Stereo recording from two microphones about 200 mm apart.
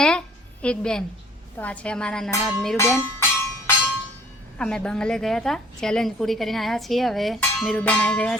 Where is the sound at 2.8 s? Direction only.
15° left (ahead or behind).